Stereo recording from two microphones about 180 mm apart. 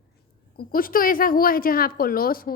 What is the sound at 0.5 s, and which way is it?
A woman's voice, 55° left (ahead or behind).